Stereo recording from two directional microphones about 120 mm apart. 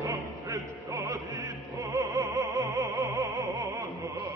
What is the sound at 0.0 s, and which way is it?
Opera, 25° right (ahead or behind).